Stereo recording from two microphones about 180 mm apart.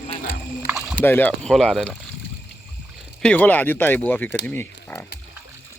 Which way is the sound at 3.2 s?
5° left (ahead or behind).